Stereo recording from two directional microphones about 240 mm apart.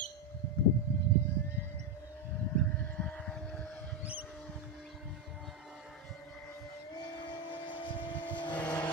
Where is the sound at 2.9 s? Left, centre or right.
Centre.